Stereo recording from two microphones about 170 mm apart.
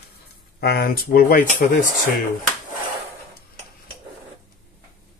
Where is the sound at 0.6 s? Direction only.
70° left (ahead or behind); by 1.9 s 50° left (ahead or behind).